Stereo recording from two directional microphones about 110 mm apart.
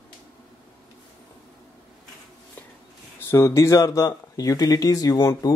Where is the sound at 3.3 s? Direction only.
25° left (ahead or behind).